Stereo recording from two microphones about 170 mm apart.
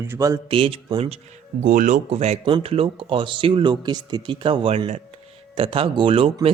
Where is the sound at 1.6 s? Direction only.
45° right (ahead or behind); by 6.3 s 30° right (ahead or behind).